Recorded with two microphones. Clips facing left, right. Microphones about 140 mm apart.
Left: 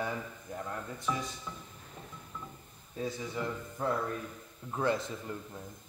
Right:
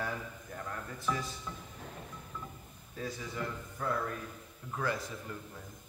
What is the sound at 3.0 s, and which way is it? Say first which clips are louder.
A man's voice: left 3 dB; 20° left (ahead or behind).